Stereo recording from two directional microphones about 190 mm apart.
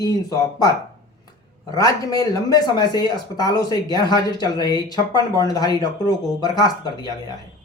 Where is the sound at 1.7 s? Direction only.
20° left (ahead or behind).